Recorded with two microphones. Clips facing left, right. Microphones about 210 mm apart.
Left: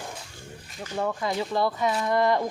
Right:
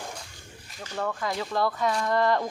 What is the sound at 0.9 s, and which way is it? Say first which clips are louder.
Speech: left 3 dB; 15° left (ahead or behind).